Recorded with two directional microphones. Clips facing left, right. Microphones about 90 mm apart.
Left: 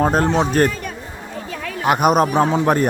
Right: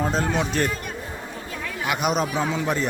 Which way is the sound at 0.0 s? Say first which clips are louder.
Left 7 dB; 50° left (ahead or behind).